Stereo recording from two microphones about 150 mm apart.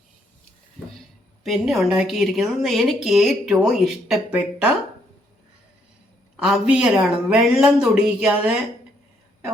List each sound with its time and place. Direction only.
1.5 s a woman's voice: 5° right (ahead or behind)
6.3 s a woman's voice: 5° right (ahead or behind)